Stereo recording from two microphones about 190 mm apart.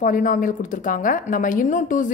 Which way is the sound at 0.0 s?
45° left (ahead or behind).